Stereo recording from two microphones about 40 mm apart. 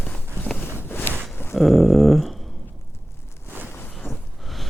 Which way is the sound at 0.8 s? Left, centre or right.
Left.